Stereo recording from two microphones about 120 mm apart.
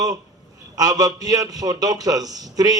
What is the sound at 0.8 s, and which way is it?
A man's voice, 30° right (ahead or behind).